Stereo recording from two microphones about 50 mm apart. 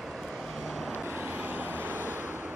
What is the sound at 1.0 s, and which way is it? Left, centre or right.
Vehicle, right.